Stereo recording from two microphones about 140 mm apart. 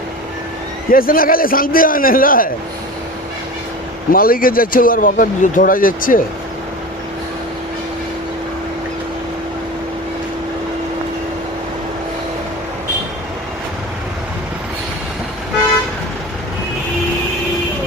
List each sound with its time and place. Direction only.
0.9 s a man's voice: 90° left
4.1 s speech: 90° left